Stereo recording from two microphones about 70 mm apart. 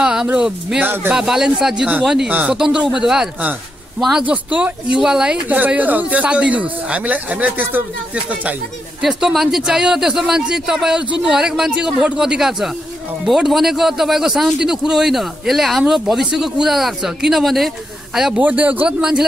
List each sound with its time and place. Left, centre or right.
0.0 s a sound: centre
0.7 s speech: right
1.1 s speech: centre
2.2 s speech: right
2.5 s speech: centre
4.2 s speech: right
9.0 s a man's voice: centre
18.4 s speech: right
18.9 s speech: centre